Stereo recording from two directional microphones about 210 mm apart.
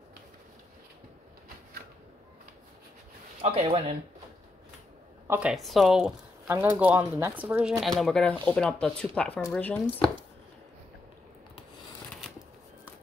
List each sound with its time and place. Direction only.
3.3 s speech: 25° right (ahead or behind)
5.3 s speech: 5° right (ahead or behind)